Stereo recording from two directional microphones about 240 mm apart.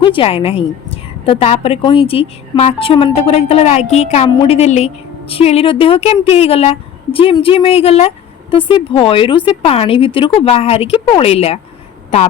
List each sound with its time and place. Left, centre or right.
0.0 s a woman's voice: left